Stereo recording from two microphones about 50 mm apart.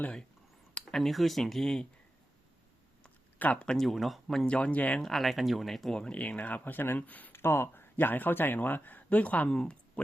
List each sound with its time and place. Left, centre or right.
0.7 s speech: centre
3.3 s speech: left
3.8 s speech: centre
4.4 s speech: left
5.0 s speech: centre
6.1 s speech: left
7.3 s speech: left
7.9 s speech: left
9.5 s speech: centre